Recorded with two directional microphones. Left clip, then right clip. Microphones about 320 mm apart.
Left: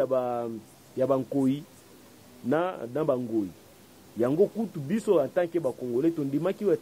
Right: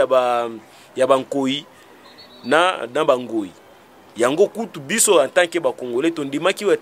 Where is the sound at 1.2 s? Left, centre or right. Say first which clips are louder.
Right 6 dB; right.